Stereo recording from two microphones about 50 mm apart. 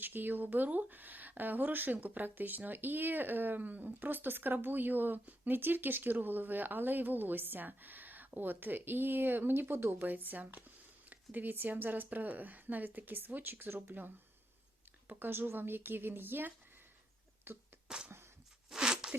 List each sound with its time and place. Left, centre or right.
0.0 s speech: right
10.1 s speech: right
15.1 s speech: right
17.8 s a sound: centre
18.7 s zipper: centre